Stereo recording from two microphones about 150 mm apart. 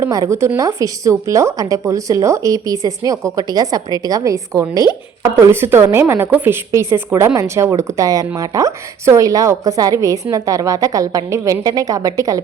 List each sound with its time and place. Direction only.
0.0 s a woman's voice: 20° right (ahead or behind)